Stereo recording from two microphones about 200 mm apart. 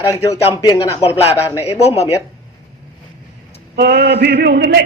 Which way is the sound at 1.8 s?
30° left (ahead or behind).